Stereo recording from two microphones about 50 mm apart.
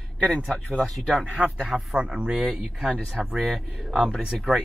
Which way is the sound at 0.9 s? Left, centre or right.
Centre.